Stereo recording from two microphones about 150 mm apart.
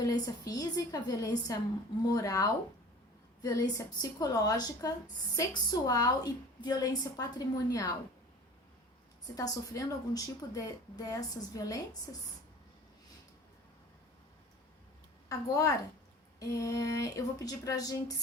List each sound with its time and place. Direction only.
0.0 s a woman's voice: 25° left (ahead or behind)
9.2 s a woman's voice: 25° left (ahead or behind)
15.3 s a woman's voice: 20° left (ahead or behind)